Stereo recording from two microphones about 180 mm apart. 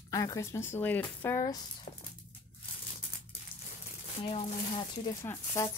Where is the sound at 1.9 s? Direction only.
50° left (ahead or behind).